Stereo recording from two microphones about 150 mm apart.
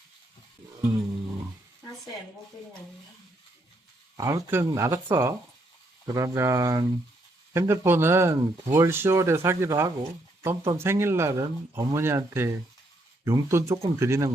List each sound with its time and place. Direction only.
4.2 s speech: 25° right (ahead or behind)